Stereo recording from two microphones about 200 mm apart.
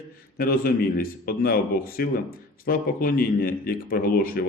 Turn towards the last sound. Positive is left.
turn(degrees=45)  # may be behind; listen again after turning